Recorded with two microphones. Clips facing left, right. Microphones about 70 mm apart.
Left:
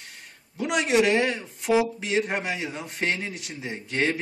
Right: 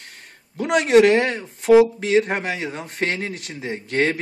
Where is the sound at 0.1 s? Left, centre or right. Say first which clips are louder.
Right 2 dB; right.